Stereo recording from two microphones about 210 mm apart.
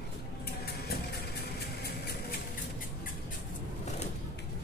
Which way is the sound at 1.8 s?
50° left (ahead or behind).